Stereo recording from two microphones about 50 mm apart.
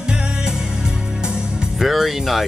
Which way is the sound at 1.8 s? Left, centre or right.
Centre.